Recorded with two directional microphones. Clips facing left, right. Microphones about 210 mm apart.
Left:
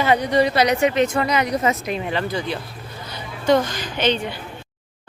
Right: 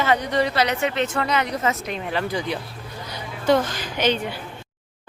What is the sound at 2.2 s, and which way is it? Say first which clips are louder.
Speech: left 1 dB; 15° right (ahead or behind).